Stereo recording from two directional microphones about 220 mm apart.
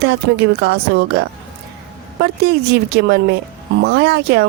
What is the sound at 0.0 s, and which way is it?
Speech, 50° right (ahead or behind).